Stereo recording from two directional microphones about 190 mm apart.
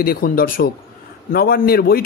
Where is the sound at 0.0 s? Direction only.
50° left (ahead or behind).